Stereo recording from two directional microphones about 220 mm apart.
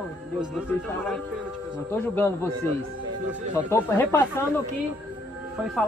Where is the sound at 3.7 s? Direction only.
10° left (ahead or behind).